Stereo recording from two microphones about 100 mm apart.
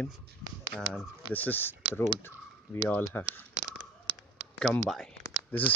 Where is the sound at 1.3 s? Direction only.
20° left (ahead or behind).